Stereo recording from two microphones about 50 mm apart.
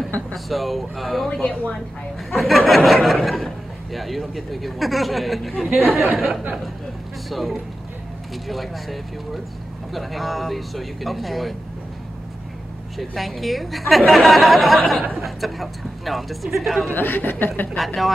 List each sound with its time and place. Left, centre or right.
0.3 s speech: centre
1.3 s speech: left
2.3 s speech: centre
12.9 s speech: centre
16.9 s a woman's voice: left
17.7 s speech: centre